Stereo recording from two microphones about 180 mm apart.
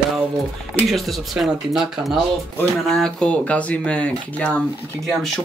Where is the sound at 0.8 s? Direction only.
Centre (ahead or behind).